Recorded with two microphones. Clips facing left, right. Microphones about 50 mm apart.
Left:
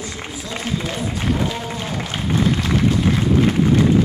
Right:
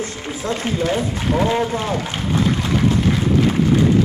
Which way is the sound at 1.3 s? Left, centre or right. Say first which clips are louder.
Right 8 dB; right.